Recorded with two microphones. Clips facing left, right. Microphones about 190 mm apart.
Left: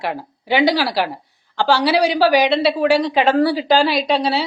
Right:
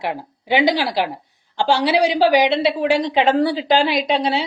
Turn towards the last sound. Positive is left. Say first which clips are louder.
# left 1 dB
turn(degrees=-20)  # may be behind; listen again after turning